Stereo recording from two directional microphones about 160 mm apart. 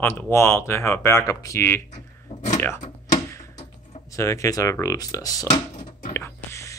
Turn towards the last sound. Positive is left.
turn(degrees=15)  # may be behind; listen again after turning